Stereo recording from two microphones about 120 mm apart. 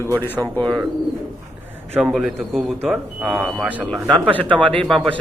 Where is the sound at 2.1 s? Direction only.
Centre (ahead or behind).